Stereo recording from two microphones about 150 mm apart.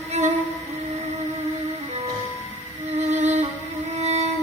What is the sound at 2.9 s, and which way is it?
Music, 45° right (ahead or behind).